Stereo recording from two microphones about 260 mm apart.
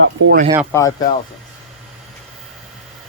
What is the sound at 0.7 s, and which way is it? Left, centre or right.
Speech, centre.